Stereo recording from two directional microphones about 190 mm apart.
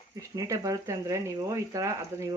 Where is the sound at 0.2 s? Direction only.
15° right (ahead or behind).